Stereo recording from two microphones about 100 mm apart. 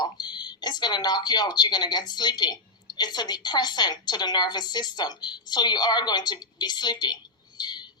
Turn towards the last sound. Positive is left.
turn(degrees=45)  # may be behind; listen again after turning